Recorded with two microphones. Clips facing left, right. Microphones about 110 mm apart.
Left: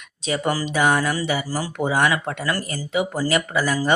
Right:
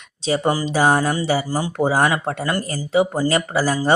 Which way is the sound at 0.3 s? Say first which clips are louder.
Right 3 dB; 30° right (ahead or behind).